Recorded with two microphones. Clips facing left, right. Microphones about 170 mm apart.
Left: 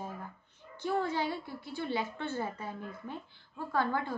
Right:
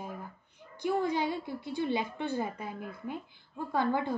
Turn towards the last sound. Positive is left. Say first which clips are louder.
# right 2 dB
turn(degrees=-15)  # may be behind; listen again after turning